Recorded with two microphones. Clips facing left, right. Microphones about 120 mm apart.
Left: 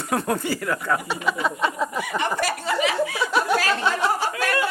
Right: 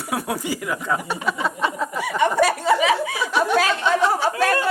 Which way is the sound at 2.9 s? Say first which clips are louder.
Left 1 dB; 10° right (ahead or behind).